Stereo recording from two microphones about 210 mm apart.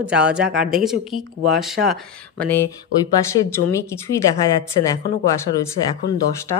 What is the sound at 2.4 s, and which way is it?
Speech, 10° left (ahead or behind).